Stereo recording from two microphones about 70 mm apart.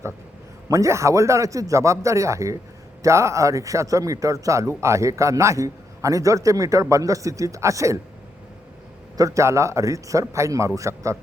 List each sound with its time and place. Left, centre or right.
0.7 s a man's voice: right
9.1 s a man's voice: right